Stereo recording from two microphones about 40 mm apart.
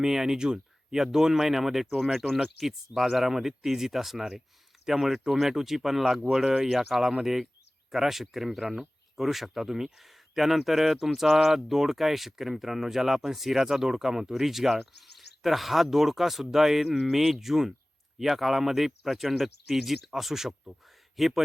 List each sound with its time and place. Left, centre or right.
0.0 s speech: centre